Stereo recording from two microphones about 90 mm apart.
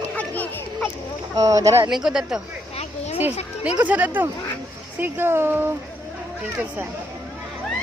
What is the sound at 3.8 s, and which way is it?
Speech, 20° right (ahead or behind).